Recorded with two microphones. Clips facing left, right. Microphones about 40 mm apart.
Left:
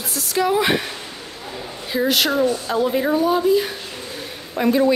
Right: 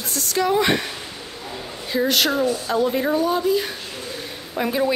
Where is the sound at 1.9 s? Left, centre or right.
Centre.